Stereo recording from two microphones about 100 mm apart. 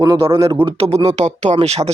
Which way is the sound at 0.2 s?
55° right (ahead or behind).